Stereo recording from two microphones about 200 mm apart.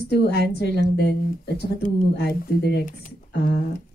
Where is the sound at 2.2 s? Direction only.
55° left (ahead or behind).